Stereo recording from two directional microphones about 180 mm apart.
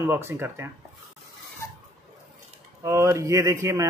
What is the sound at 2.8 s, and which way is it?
A man's voice, 15° right (ahead or behind).